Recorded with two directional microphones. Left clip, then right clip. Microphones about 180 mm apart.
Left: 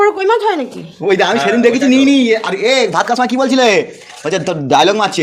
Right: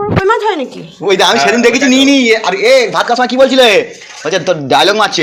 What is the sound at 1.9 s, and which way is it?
Speech, 50° left (ahead or behind).